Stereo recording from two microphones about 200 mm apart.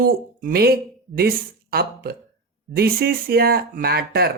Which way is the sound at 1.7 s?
50° right (ahead or behind).